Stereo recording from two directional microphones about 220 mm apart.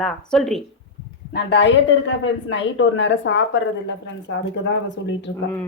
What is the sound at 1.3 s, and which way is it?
Speech, 50° left (ahead or behind).